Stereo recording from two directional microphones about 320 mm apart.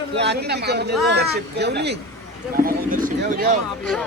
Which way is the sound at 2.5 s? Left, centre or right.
Right.